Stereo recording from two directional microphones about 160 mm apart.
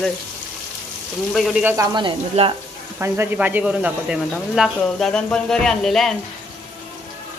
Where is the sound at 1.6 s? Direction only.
15° right (ahead or behind).